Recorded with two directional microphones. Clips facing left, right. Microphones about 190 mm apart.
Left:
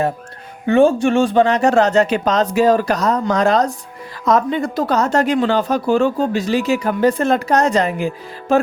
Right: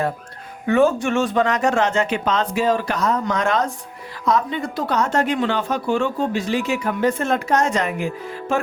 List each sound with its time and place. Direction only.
0.7 s speech: 30° left (ahead or behind)